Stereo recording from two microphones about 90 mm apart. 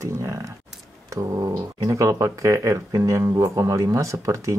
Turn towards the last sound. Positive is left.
turn(degrees=-35)  # may be behind; listen again after turning